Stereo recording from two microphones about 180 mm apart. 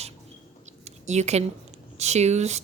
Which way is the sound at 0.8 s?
40° right (ahead or behind).